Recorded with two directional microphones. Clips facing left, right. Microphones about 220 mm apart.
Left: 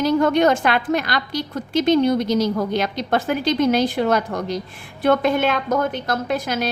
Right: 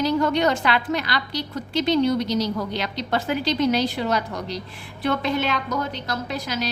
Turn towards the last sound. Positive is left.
turn(degrees=50)  # may be behind; listen again after turning